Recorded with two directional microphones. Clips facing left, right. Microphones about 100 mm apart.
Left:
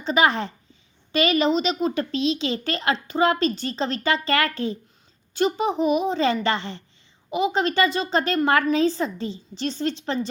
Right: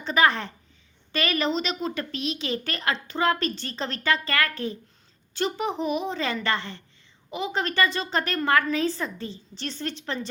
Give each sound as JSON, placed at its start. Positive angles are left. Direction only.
{"t": 0.0, "sound": "a woman's voice", "side_deg": 20}